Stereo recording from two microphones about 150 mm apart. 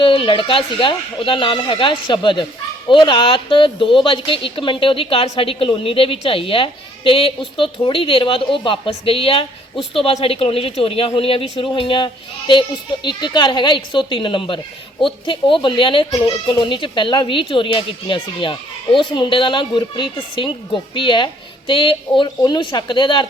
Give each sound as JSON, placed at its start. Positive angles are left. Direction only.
{"t": 0.0, "sound": "a woman's voice", "side_deg": 35}